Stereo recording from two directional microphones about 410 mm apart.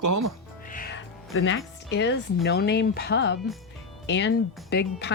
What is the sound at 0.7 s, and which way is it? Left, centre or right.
Speech, left.